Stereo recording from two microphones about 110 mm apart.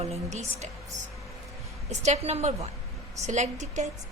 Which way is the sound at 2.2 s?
75° right (ahead or behind).